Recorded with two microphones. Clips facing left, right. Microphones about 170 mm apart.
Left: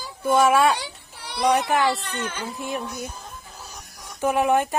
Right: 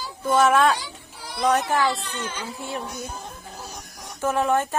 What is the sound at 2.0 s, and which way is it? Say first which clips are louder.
Speech: left 1 dB; 60° left (ahead or behind).